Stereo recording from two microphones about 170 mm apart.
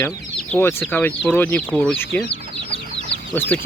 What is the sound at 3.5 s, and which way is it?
Speech, 5° left (ahead or behind).